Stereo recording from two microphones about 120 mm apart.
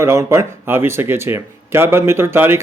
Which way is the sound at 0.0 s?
25° right (ahead or behind).